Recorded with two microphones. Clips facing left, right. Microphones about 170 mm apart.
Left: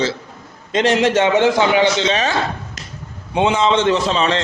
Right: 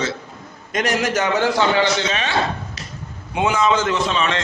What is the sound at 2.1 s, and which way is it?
Speech, 40° left (ahead or behind).